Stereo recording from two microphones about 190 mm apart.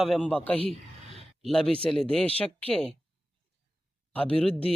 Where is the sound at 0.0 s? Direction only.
5° left (ahead or behind).